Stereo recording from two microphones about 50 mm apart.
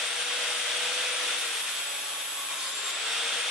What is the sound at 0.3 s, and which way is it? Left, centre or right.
Wood, centre.